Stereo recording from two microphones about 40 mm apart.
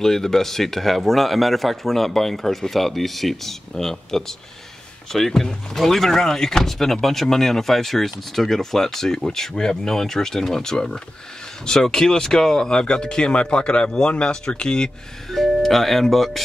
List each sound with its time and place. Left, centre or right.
0.0 s speech: centre
15.3 s speech: centre